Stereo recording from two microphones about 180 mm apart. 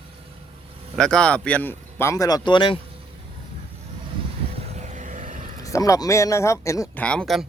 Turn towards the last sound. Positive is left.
turn(degrees=0)  # may be behind; listen again after turning